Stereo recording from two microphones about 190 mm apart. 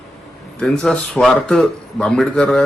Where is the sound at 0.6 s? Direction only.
5° left (ahead or behind).